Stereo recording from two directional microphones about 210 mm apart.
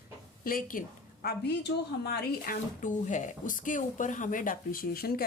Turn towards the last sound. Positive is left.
turn(degrees=45)  # may be behind; listen again after turning